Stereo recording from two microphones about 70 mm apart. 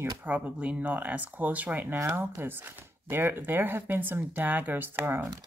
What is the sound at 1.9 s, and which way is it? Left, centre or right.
Speech, right.